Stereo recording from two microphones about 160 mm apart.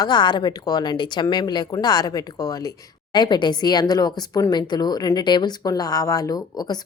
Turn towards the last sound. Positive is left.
turn(degrees=25)  # may be behind; listen again after turning